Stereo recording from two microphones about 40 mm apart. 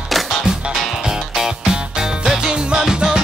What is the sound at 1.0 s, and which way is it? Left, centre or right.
Music, centre.